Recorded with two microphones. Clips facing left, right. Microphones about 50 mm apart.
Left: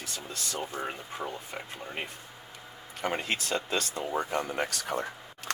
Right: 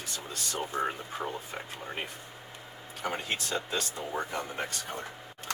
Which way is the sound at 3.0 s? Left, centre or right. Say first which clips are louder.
Left 2 dB; left.